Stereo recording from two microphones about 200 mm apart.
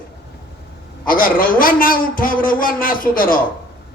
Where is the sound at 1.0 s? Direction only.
45° left (ahead or behind).